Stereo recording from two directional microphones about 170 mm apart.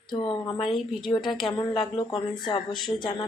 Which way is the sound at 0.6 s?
Centre (ahead or behind).